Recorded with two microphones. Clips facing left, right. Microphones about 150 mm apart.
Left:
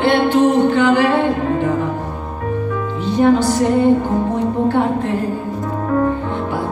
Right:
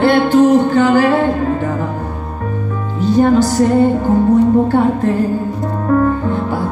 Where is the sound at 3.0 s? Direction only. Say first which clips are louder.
Right 3 dB; 40° right (ahead or behind).